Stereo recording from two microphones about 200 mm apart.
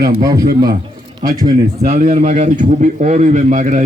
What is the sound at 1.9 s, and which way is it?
A man's voice, 35° right (ahead or behind).